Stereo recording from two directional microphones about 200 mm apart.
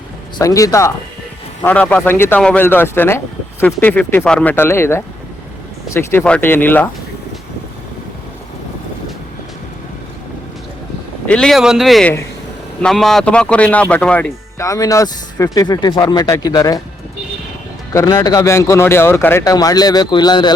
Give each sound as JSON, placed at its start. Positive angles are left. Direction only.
{"t": 0.3, "sound": "speech", "side_deg": 15}
{"t": 11.3, "sound": "speech", "side_deg": 5}
{"t": 17.9, "sound": "speech", "side_deg": 20}